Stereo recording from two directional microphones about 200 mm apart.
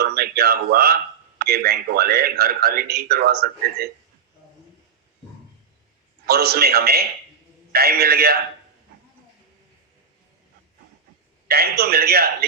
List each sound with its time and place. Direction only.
0.0 s speech: 50° right (ahead or behind)
6.2 s speech: 50° right (ahead or behind)
11.4 s speech: 50° right (ahead or behind)